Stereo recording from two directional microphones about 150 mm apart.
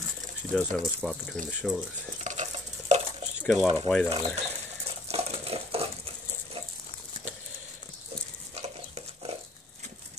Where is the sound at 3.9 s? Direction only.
Centre (ahead or behind).